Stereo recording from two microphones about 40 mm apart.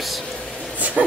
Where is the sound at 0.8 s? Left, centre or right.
Right.